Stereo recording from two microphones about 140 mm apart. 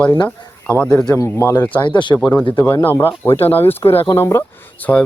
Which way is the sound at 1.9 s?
35° left (ahead or behind).